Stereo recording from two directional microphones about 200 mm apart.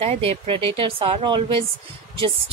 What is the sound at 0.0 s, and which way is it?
Speech, 30° right (ahead or behind).